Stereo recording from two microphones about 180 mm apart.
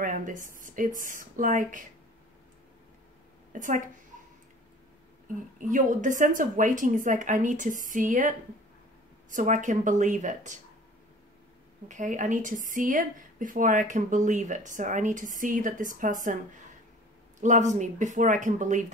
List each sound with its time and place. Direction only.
0.0 s a woman's voice: 45° right (ahead or behind)
3.5 s a woman's voice: 45° right (ahead or behind)
5.3 s a woman's voice: 45° right (ahead or behind)
11.9 s a woman's voice: 45° right (ahead or behind)
17.4 s a woman's voice: 45° right (ahead or behind)